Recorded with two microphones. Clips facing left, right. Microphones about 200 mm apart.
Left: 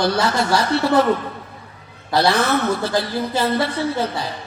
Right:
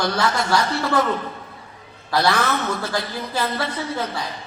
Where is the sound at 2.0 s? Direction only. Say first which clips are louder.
Left 3 dB; 25° left (ahead or behind).